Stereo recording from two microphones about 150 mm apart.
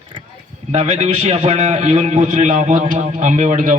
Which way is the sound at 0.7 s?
45° right (ahead or behind).